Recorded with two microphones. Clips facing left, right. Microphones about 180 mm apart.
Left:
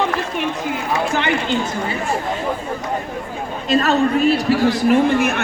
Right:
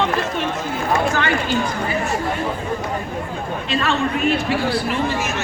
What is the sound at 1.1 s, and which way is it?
Speech, 20° left (ahead or behind).